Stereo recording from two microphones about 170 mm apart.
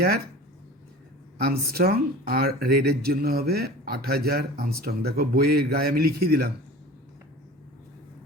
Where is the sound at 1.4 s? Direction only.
65° right (ahead or behind).